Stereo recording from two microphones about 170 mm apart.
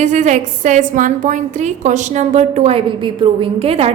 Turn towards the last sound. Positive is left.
turn(degrees=-35)  # may be behind; listen again after turning